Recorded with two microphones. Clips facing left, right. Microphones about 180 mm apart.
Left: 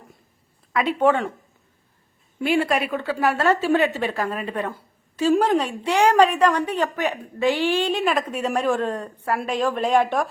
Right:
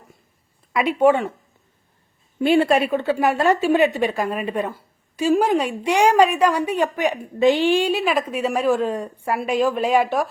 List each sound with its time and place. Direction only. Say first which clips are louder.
0.7 s a woman's voice: right 3 dB; 10° right (ahead or behind)
2.4 s a woman's voice: right 5 dB; 30° right (ahead or behind); by 10.2 s 5° right (ahead or behind)